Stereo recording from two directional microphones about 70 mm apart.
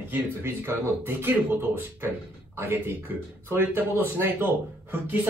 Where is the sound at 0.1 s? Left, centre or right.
Right.